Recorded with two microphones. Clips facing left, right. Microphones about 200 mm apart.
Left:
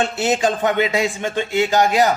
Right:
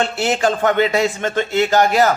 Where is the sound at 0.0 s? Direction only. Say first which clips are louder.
Right 1 dB; 20° left (ahead or behind).